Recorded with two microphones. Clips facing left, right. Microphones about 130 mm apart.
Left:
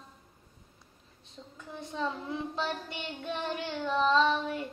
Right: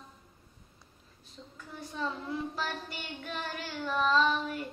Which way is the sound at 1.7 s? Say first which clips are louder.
Left 2 dB; 25° left (ahead or behind).